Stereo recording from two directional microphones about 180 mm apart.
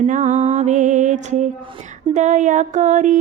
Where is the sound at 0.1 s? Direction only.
45° right (ahead or behind).